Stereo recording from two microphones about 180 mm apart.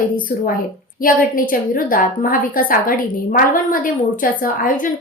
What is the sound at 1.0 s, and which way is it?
A woman's voice, 50° left (ahead or behind).